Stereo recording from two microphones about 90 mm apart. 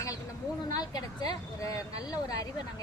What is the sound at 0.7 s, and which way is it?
A woman's voice, 50° left (ahead or behind).